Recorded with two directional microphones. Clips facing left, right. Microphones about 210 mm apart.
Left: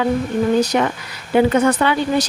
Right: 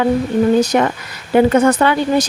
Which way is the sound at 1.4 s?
45° right (ahead or behind).